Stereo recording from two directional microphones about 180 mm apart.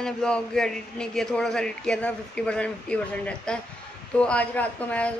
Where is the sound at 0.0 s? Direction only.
5° left (ahead or behind).